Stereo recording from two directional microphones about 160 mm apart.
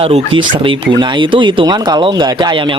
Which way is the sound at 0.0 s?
35° right (ahead or behind).